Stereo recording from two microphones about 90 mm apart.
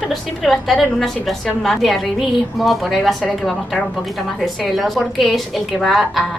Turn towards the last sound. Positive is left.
turn(degrees=0)  # may be behind; listen again after turning